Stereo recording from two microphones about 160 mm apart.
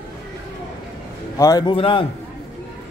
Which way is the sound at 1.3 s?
20° left (ahead or behind).